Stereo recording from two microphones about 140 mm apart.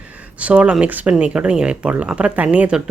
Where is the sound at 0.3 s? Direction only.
10° right (ahead or behind).